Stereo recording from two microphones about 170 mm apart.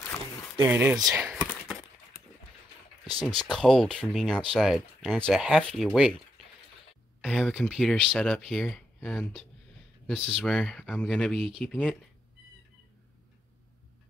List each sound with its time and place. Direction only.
0.7 s speech: 10° right (ahead or behind)
0.9 s speech: 20° right (ahead or behind)
3.1 s a sound: 35° right (ahead or behind)
3.3 s speech: 5° left (ahead or behind)
7.2 s speech: centre (ahead or behind)